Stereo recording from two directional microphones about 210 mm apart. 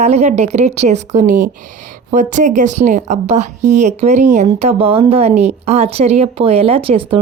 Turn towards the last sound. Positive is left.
turn(degrees=-25)  # may be behind; listen again after turning